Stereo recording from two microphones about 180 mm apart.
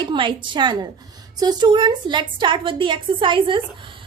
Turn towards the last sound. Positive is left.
turn(degrees=-30)  # may be behind; listen again after turning